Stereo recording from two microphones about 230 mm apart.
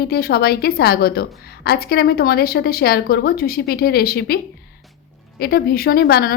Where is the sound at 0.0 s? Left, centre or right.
Left.